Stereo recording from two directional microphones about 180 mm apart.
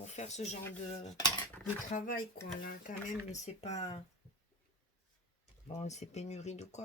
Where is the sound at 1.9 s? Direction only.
50° left (ahead or behind).